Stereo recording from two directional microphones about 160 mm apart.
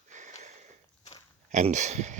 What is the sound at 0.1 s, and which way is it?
Sniff, 50° right (ahead or behind).